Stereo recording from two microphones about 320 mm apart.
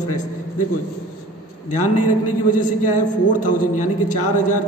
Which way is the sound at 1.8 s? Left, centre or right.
Left.